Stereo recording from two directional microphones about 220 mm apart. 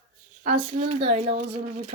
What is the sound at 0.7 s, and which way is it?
Speech, 30° right (ahead or behind).